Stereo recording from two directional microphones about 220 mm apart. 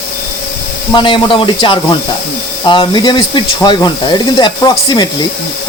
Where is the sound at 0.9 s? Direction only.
20° left (ahead or behind).